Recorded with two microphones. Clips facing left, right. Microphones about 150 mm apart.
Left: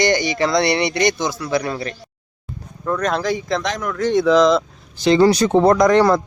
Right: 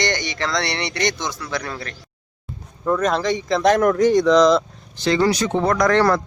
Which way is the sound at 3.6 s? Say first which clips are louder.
Right 9 dB; 50° right (ahead or behind).